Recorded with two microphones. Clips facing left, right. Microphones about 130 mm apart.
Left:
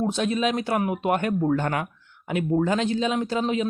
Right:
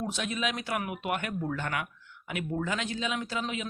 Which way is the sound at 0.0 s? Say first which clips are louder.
Left 9 dB; 35° left (ahead or behind).